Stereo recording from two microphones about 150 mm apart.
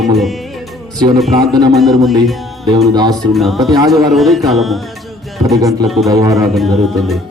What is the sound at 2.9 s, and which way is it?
Speech, 25° right (ahead or behind).